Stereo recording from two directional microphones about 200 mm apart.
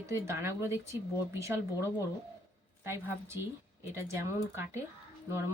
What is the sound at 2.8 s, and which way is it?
Speech, 10° right (ahead or behind).